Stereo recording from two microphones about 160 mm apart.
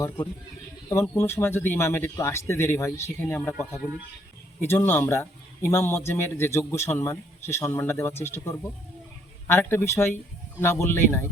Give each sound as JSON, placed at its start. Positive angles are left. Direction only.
{"t": 1.0, "sound": "a man's voice", "side_deg": 15}
{"t": 3.8, "sound": "speech", "side_deg": -10}
{"t": 4.6, "sound": "a man's voice", "side_deg": 15}